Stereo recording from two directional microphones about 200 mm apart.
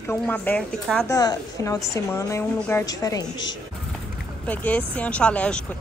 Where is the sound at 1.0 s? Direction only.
20° left (ahead or behind).